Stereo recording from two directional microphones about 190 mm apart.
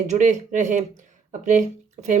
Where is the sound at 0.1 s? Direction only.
40° right (ahead or behind).